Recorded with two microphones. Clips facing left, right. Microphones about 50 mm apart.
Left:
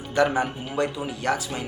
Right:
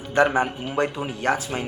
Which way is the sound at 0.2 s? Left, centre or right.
Right.